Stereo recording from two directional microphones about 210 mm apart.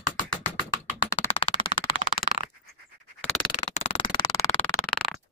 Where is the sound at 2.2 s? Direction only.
45° left (ahead or behind).